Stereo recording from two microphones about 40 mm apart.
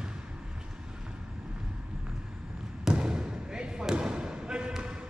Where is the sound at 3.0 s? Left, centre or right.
Centre.